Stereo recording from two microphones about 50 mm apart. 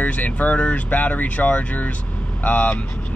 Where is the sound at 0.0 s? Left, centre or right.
Left.